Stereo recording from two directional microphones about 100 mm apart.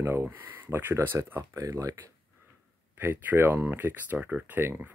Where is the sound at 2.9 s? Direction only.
25° right (ahead or behind).